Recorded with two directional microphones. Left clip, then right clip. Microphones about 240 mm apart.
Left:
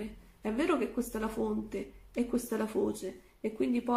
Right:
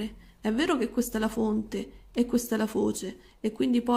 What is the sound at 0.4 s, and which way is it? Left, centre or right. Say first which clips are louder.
Speech: right 4 dB; right.